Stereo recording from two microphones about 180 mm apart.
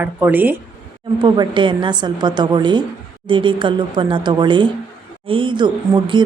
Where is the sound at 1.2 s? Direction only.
25° right (ahead or behind).